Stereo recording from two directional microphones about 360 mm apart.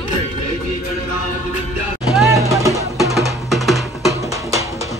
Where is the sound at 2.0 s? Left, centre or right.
Centre.